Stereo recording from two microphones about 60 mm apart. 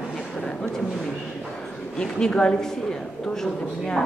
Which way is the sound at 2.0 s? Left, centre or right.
Centre.